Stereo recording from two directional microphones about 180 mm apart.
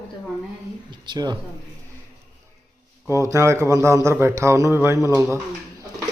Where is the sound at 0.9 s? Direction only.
25° right (ahead or behind).